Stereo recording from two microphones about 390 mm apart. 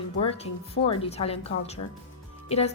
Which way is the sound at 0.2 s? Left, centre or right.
Centre.